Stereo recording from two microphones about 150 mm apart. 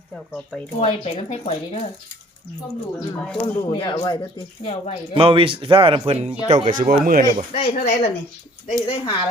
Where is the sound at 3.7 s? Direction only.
30° left (ahead or behind).